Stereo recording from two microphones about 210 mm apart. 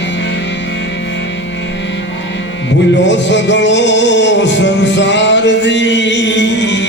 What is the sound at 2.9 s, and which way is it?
Music, 60° left (ahead or behind).